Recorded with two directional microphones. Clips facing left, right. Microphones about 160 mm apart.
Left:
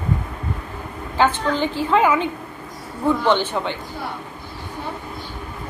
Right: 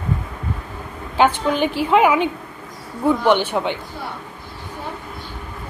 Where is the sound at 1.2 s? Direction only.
15° right (ahead or behind).